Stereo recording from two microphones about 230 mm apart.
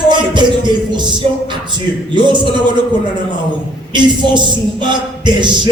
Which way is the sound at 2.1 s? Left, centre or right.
Centre.